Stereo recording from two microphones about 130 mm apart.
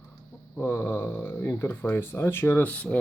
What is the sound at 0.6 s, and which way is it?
Speech, 15° left (ahead or behind).